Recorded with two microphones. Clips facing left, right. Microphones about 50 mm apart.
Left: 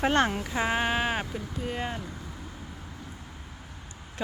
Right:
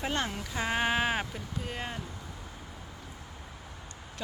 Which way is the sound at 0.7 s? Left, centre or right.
Centre.